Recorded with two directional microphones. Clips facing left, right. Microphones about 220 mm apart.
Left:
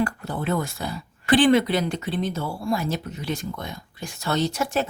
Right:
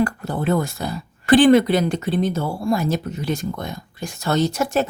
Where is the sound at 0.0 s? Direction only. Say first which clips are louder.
Right 4 dB; 40° right (ahead or behind).